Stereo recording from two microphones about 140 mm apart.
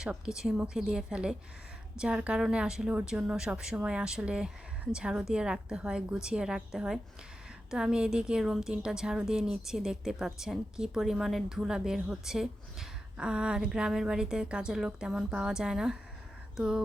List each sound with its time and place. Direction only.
0.0 s a woman's voice: 5° right (ahead or behind)